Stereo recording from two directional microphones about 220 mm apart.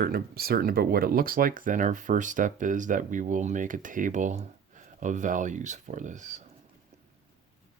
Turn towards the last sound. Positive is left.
turn(degrees=-35)  # may be behind; listen again after turning